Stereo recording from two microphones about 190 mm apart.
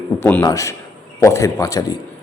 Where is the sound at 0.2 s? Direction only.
10° left (ahead or behind).